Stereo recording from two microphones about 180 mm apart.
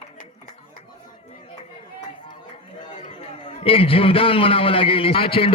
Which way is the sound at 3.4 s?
30° left (ahead or behind).